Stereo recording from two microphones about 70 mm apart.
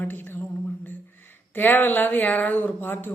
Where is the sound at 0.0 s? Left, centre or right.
Left.